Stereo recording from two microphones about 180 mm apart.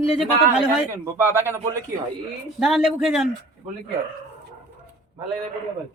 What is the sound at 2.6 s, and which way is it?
Speech, centre (ahead or behind).